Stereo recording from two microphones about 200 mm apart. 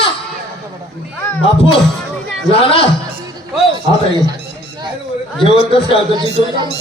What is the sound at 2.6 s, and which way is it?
Speech, 25° left (ahead or behind).